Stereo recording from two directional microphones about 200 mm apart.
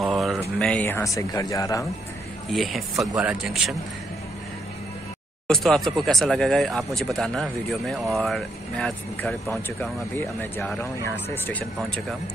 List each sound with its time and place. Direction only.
0.0 s a sound: centre (ahead or behind)
0.6 s speech: 5° left (ahead or behind)
2.5 s speech: centre (ahead or behind)
5.5 s speech: centre (ahead or behind)